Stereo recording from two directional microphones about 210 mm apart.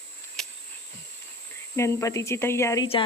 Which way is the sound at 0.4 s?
Centre (ahead or behind).